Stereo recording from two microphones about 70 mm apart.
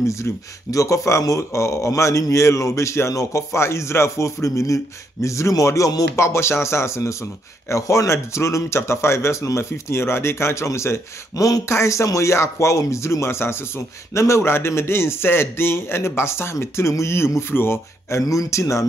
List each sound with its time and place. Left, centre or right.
0.0 s a man's voice: left
18.2 s speech: left